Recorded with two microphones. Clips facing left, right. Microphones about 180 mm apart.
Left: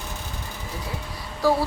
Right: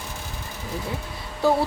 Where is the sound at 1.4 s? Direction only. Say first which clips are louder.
Even; 25° right (ahead or behind).